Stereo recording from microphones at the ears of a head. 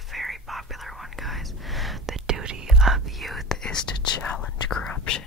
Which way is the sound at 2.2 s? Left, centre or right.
Right.